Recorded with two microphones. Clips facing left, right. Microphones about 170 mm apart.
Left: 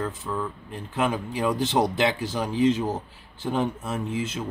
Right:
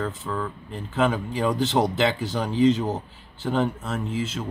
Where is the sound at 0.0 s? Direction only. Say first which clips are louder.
Right 1 dB; 10° left (ahead or behind).